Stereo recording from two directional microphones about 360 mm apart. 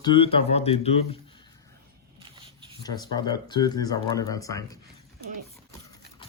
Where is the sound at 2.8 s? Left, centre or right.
Centre.